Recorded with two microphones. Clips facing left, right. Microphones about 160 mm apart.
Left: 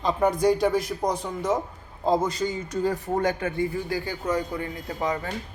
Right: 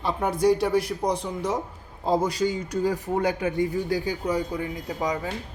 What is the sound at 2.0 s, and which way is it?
A man's voice, 10° right (ahead or behind).